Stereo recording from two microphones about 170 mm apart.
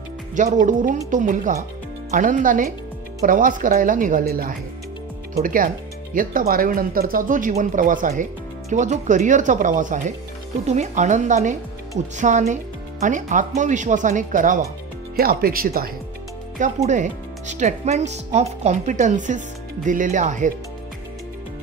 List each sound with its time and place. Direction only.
0.4 s speech: 50° right (ahead or behind)
15.1 s speech: 60° right (ahead or behind)
16.5 s speech: 45° right (ahead or behind)